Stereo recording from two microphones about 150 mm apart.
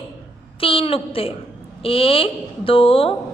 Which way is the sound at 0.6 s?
40° left (ahead or behind).